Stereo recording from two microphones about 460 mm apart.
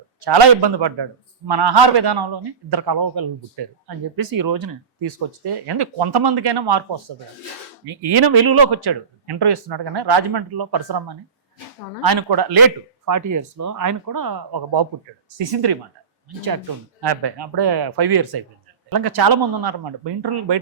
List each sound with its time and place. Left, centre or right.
0.3 s a man's voice: right
13.1 s speech: right
15.4 s speech: right
17.0 s a man's voice: right